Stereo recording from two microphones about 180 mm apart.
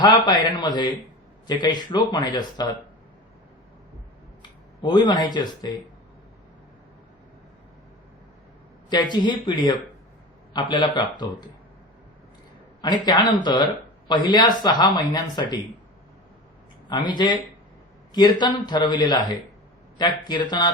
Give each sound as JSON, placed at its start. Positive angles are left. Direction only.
{"t": 0.0, "sound": "speech", "side_deg": 20}
{"t": 4.8, "sound": "speech", "side_deg": 25}
{"t": 9.1, "sound": "speech", "side_deg": 25}
{"t": 13.1, "sound": "speech", "side_deg": 25}
{"t": 16.9, "sound": "speech", "side_deg": 25}